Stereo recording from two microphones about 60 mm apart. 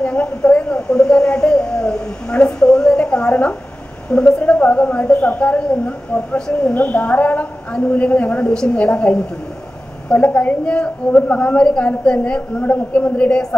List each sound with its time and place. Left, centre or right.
0.0 s a sound: centre
4.3 s a woman's voice: left
10.2 s a woman's voice: left